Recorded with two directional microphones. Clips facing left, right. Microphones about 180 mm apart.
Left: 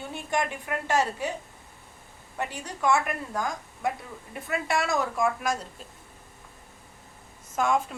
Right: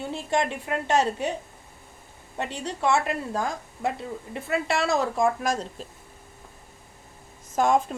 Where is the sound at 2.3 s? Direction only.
25° right (ahead or behind).